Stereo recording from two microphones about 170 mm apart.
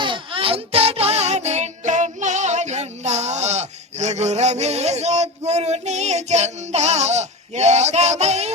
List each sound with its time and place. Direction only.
0.0 s child singing: 30° right (ahead or behind)